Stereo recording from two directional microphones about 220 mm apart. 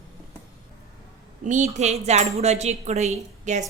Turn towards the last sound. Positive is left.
turn(degrees=-30)  # may be behind; listen again after turning